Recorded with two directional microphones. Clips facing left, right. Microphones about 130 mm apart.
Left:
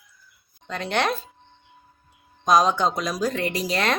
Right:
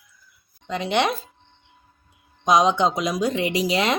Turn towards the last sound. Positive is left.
turn(degrees=-15)  # may be behind; listen again after turning